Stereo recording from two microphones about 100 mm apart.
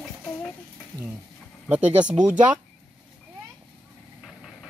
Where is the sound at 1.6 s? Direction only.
15° right (ahead or behind).